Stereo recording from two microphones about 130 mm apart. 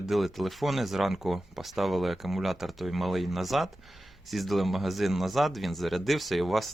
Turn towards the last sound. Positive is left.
turn(degrees=0)  # may be behind; listen again after turning